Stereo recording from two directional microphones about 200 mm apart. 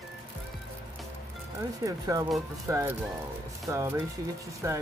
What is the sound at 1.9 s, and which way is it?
Speech, 15° right (ahead or behind).